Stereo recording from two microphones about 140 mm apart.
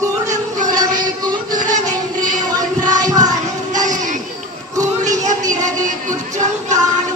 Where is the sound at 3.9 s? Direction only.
65° right (ahead or behind).